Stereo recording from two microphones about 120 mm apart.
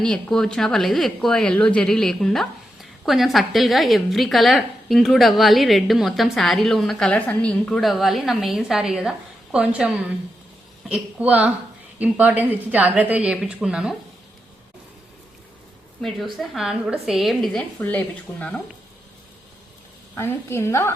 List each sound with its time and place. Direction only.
0.0 s a woman's voice: 5° left (ahead or behind)
16.0 s a woman's voice: centre (ahead or behind)
17.7 s speech: 15° left (ahead or behind)
20.1 s a woman's voice: 20° left (ahead or behind)